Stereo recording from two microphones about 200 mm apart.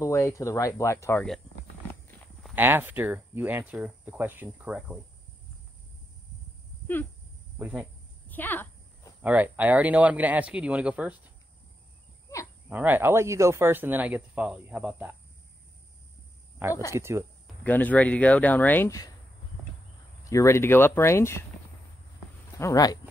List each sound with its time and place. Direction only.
0.0 s speech: 15° left (ahead or behind)
2.0 s livestock: 10° left (ahead or behind)
2.5 s speech: 10° right (ahead or behind)
7.5 s speech: 5° right (ahead or behind)
8.3 s a sound: 10° left (ahead or behind)
9.2 s speech: 10° right (ahead or behind)
12.6 s speech: 10° right (ahead or behind)
16.6 s speech: 10° right (ahead or behind)
17.6 s speech: 10° left (ahead or behind)
20.2 s speech: 15° left (ahead or behind)
22.6 s speech: 15° left (ahead or behind)